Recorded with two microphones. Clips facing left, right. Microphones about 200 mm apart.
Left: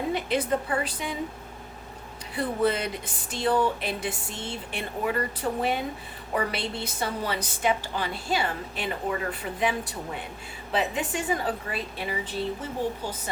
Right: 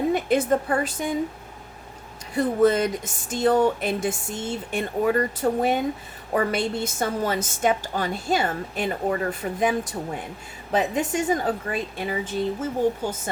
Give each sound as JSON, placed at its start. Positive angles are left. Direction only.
{"t": 0.1, "sound": "a woman's voice", "side_deg": -50}
{"t": 2.3, "sound": "a woman's voice", "side_deg": -45}